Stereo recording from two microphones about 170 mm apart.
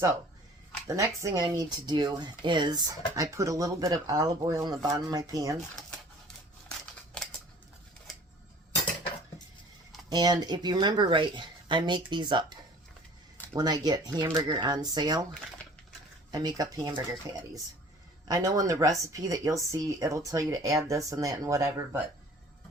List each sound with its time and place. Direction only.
0.9 s speech: 20° right (ahead or behind)
6.2 s scissors: 5° left (ahead or behind)
10.1 s speech: 25° right (ahead or behind)
16.3 s speech: 25° right (ahead or behind)